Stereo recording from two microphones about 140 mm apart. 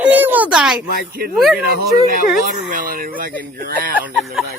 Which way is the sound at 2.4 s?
75° right (ahead or behind).